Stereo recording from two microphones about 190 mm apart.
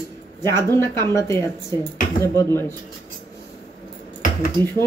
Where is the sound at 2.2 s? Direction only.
15° left (ahead or behind).